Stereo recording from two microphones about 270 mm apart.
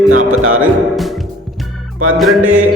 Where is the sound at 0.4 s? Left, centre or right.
Right.